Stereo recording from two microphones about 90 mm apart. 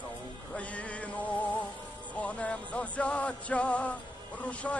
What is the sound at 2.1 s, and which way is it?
Music, 10° left (ahead or behind).